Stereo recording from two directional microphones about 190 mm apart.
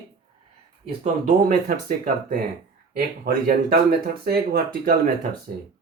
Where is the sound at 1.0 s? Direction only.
45° right (ahead or behind).